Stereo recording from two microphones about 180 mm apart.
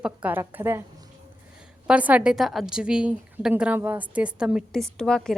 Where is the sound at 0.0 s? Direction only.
10° right (ahead or behind).